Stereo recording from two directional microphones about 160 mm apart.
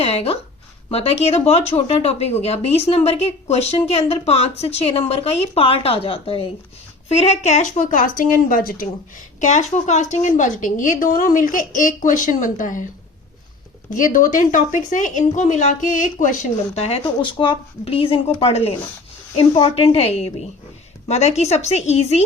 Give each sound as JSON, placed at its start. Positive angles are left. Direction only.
{"t": 0.0, "sound": "a woman's voice", "side_deg": 40}
{"t": 13.9, "sound": "a woman's voice", "side_deg": 55}